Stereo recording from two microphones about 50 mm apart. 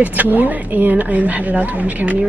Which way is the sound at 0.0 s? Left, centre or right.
Right.